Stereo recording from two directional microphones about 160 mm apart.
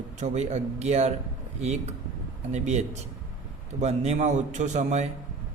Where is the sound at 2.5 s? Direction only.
45° right (ahead or behind).